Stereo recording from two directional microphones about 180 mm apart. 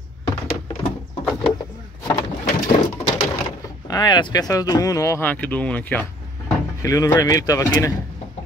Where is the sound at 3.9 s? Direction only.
20° left (ahead or behind).